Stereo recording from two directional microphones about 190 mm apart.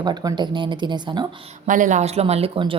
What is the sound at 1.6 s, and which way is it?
A woman's voice, 40° right (ahead or behind).